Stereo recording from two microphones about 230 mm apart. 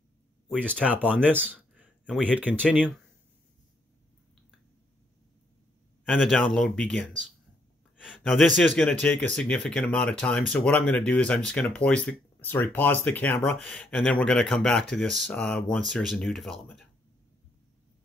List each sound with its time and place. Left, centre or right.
0.5 s speech: centre
0.8 s speech: centre
2.6 s speech: centre
6.0 s speech: centre